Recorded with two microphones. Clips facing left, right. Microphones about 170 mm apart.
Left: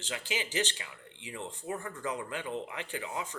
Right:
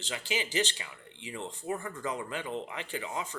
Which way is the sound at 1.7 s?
10° right (ahead or behind).